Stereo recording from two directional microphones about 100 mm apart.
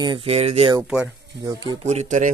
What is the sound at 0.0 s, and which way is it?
Speech, 55° right (ahead or behind).